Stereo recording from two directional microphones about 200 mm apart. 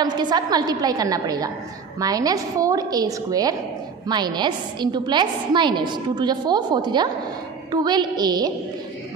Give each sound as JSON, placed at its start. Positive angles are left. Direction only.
{"t": 0.0, "sound": "a woman's voice", "side_deg": -20}